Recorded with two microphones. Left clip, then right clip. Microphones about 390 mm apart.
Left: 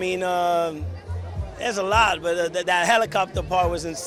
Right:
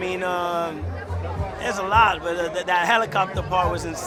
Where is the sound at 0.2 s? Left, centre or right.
Left.